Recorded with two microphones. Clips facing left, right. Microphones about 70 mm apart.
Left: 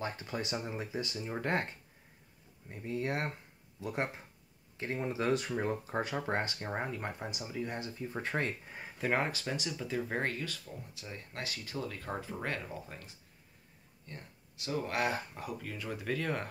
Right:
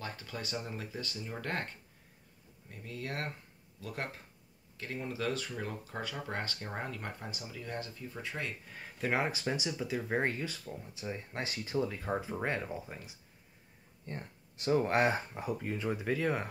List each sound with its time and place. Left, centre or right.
0.0 s speech: left
2.7 s speech: left
6.4 s speech: centre
8.1 s speech: left
8.6 s speech: centre
9.0 s speech: centre
9.3 s speech: centre
10.2 s speech: centre
14.0 s speech: right; by 16.4 s centre